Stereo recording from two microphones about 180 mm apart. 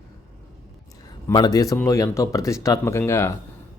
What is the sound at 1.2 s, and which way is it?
A man's voice, 20° left (ahead or behind).